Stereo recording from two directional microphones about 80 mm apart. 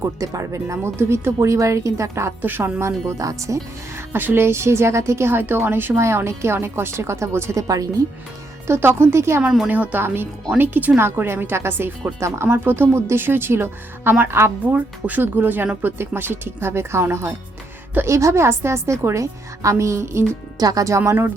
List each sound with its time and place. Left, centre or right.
0.2 s speech: right
2.4 s speech: right
7.7 s speech: right
8.6 s speech: right
9.4 s speech: centre
9.6 s speech: centre
14.7 s speech: centre; by 20.2 s right
20.6 s speech: right